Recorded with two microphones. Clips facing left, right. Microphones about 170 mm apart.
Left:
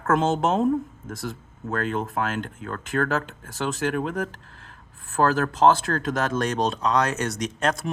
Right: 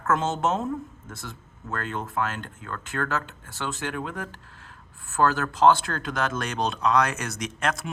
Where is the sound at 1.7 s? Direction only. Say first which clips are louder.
Left 5 dB; 50° left (ahead or behind).